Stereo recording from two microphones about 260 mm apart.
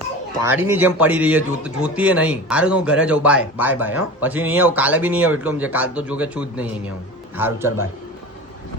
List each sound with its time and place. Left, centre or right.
0.4 s a man's voice: centre